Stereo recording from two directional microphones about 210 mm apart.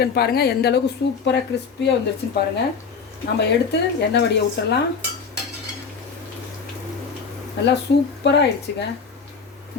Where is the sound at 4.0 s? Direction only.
55° left (ahead or behind).